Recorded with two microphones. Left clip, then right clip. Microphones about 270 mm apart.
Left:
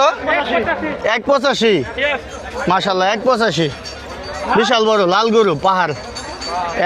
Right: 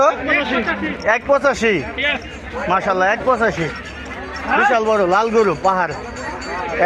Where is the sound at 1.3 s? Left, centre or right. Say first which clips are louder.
Left 2 dB; left.